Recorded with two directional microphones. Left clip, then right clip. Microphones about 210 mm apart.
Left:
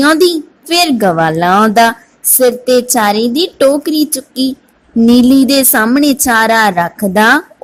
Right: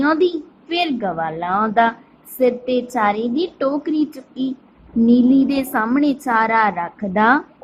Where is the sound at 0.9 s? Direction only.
50° left (ahead or behind).